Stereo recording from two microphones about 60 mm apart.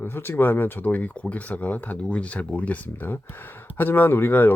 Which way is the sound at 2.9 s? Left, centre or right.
Left.